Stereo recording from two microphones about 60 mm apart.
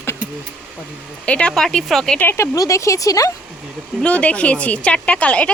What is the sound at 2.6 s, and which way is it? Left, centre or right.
Speech, left.